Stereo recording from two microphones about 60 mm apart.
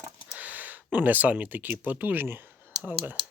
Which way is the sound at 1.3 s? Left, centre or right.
Right.